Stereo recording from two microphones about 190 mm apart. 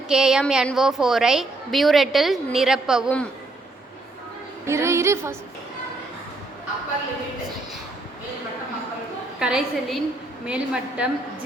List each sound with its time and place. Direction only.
0.1 s a woman's voice: 5° right (ahead or behind)
4.6 s a woman's voice: 15° right (ahead or behind)
9.4 s a woman's voice: 5° right (ahead or behind)